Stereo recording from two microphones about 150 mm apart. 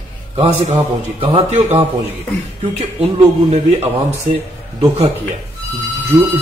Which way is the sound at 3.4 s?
45° right (ahead or behind).